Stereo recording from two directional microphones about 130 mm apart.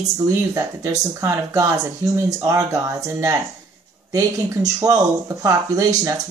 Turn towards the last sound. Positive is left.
turn(degrees=-25)  # may be behind; listen again after turning